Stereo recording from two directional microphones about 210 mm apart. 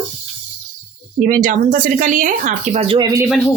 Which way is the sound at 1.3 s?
40° right (ahead or behind).